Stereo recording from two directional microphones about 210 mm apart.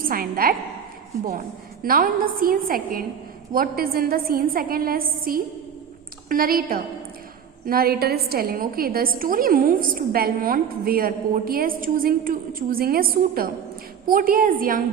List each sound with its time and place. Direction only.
0.1 s a woman's voice: 45° right (ahead or behind)
1.8 s a woman's voice: 45° right (ahead or behind)